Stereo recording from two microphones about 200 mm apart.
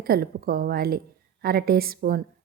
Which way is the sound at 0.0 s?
50° right (ahead or behind).